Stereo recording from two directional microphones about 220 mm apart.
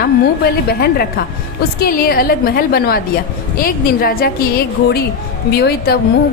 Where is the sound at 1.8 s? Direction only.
40° left (ahead or behind).